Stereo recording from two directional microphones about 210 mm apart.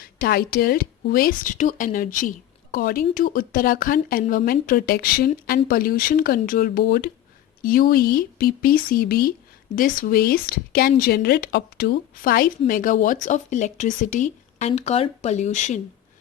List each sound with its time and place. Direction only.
0.0 s speech: 45° left (ahead or behind)